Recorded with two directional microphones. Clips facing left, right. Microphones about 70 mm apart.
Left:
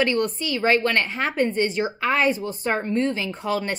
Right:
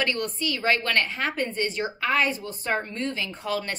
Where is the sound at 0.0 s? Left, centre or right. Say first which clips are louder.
Left 5 dB; left.